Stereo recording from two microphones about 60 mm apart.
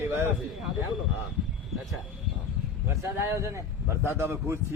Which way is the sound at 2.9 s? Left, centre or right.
Right.